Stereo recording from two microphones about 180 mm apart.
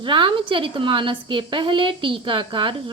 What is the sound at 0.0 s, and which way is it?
A woman's voice, 25° right (ahead or behind).